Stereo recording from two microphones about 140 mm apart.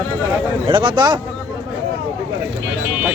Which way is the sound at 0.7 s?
35° right (ahead or behind).